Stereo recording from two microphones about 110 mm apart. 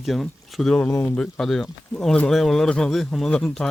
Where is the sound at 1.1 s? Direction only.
5° left (ahead or behind).